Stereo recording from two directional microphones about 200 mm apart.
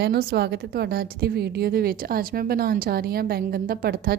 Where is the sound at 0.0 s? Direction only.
50° right (ahead or behind).